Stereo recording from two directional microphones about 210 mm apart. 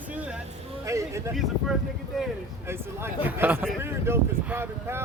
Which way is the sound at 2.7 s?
10° right (ahead or behind).